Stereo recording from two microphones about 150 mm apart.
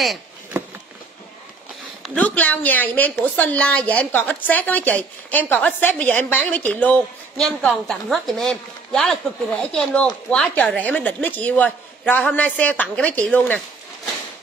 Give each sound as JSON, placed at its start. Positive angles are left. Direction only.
{"t": 2.1, "sound": "a woman's voice", "side_deg": 10}